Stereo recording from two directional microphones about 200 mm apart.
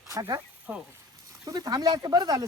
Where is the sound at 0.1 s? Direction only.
15° right (ahead or behind).